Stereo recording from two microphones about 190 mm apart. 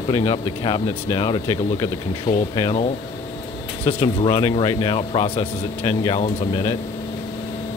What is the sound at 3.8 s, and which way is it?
Speech, 30° left (ahead or behind).